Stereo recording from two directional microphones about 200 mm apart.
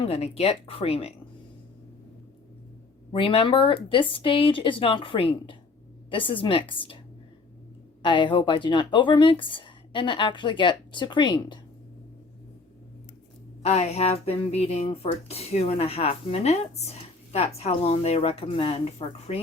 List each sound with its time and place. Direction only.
0.1 s speech: 30° left (ahead or behind)
3.1 s speech: 25° left (ahead or behind)
8.0 s speech: 25° left (ahead or behind)
13.7 s speech: 30° left (ahead or behind)